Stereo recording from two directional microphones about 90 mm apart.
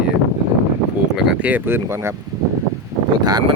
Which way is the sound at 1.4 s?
20° right (ahead or behind).